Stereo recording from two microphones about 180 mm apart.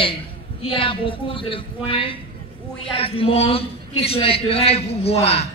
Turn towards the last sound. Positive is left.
turn(degrees=35)  # may be behind; listen again after turning